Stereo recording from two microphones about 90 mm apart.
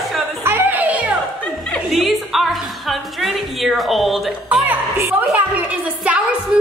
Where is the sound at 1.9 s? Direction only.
Centre (ahead or behind).